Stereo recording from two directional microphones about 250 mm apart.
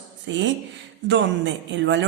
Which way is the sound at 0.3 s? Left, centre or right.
Right.